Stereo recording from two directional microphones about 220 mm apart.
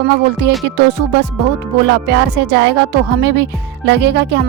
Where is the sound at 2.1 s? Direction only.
50° right (ahead or behind).